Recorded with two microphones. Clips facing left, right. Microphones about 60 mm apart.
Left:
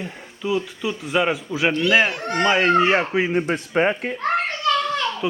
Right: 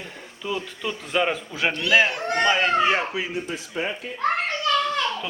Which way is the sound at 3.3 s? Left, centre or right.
Left.